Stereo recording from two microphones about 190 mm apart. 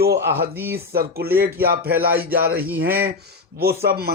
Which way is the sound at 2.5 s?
10° right (ahead or behind).